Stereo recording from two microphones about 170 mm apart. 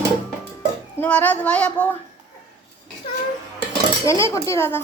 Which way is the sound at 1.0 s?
10° left (ahead or behind).